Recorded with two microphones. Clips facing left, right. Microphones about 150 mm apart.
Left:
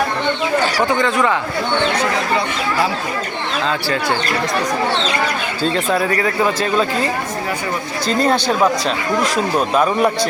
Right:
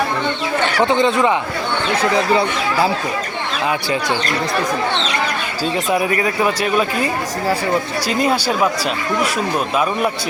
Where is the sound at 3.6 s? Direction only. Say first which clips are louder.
Right 1 dB; 15° right (ahead or behind).